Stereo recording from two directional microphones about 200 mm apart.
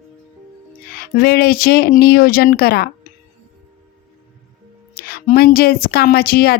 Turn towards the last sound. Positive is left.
turn(degrees=50)  # may be behind; listen again after turning